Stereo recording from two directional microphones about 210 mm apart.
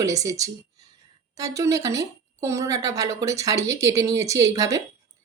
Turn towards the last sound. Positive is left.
turn(degrees=-15)  # may be behind; listen again after turning